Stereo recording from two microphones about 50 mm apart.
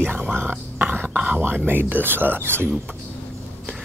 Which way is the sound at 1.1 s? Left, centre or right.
Right.